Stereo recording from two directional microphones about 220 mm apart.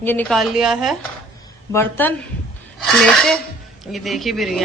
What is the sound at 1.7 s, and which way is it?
A woman's voice, 10° left (ahead or behind).